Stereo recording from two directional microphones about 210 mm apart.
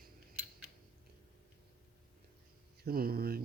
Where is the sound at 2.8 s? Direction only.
45° right (ahead or behind).